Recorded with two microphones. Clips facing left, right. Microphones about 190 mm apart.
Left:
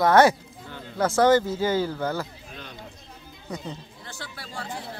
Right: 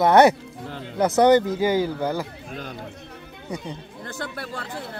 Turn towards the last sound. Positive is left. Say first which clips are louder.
# right 2 dB
turn(degrees=-60)  # may be behind; listen again after turning